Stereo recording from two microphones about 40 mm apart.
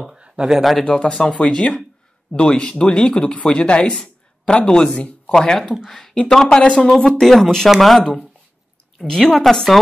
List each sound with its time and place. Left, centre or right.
0.5 s speech: centre
0.8 s speech: left; by 6.1 s centre
6.1 s speech: centre
9.3 s speech: centre